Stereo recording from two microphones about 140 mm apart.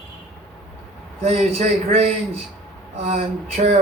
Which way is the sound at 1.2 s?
50° right (ahead or behind).